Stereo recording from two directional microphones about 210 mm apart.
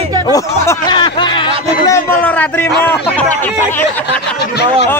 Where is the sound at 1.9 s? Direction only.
5° left (ahead or behind).